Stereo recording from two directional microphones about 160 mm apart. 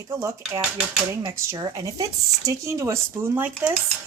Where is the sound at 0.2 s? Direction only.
15° right (ahead or behind).